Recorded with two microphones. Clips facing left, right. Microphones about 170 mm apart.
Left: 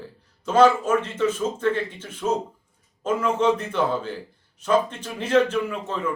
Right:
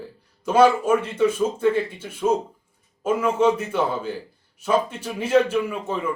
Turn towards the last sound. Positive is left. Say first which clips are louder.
# right 1 dB
turn(degrees=-10)  # may be behind; listen again after turning